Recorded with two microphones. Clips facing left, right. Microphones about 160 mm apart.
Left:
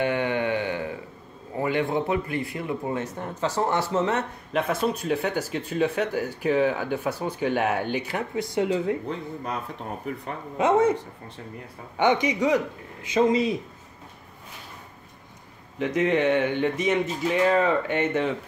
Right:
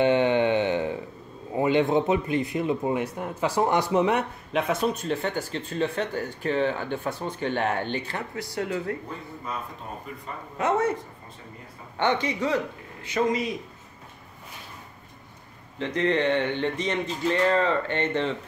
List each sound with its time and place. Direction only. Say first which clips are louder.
0.0 s a sound: right 4 dB; 25° right (ahead or behind)
1.6 s speech: right 3 dB; 20° right (ahead or behind)
4.5 s speech: left 1 dB; centre (ahead or behind); by 8.6 s 20° left (ahead or behind)
10.1 s speech: left 7 dB; 70° left (ahead or behind)
10.6 s speech: left 4 dB; 20° left (ahead or behind)
12.0 s speech: left 3 dB; 15° left (ahead or behind)
15.8 s speech: left 2 dB; 10° left (ahead or behind)